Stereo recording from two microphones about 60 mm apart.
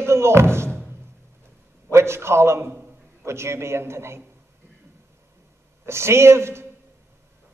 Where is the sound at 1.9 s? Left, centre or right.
Right.